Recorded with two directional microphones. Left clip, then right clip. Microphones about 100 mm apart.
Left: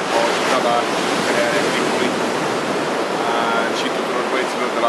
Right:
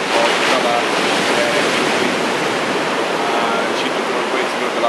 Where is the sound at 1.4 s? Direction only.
15° right (ahead or behind).